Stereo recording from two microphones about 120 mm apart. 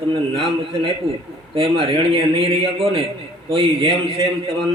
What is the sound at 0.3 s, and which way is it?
A man's voice, 50° right (ahead or behind).